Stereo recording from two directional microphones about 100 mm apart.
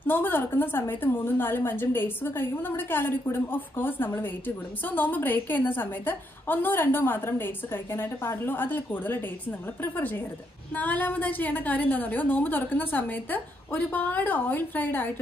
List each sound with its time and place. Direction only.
0.0 s a woman's voice: 20° left (ahead or behind)